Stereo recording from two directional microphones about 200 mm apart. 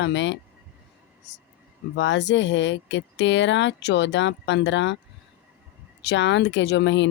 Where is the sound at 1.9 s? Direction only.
65° left (ahead or behind).